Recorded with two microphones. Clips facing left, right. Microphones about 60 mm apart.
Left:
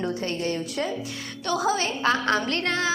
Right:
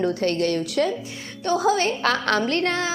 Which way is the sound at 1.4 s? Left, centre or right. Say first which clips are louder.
Right 4 dB; right.